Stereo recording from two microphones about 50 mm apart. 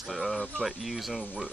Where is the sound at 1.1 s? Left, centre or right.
Centre.